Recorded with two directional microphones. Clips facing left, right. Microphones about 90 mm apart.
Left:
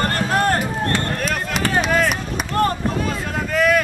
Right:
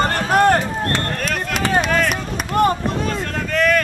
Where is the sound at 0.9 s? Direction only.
5° left (ahead or behind).